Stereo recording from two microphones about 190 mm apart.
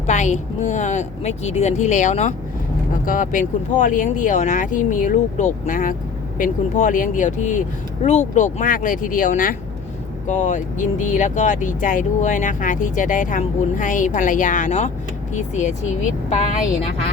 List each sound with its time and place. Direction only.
0.1 s speech: 40° left (ahead or behind)